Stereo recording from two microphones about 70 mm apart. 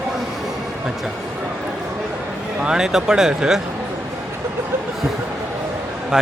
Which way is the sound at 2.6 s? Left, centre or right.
Centre.